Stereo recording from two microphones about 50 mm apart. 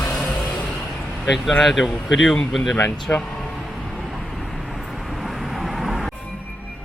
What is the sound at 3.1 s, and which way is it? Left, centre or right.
Speech, left.